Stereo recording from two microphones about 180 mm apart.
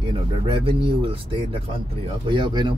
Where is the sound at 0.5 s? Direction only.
30° right (ahead or behind).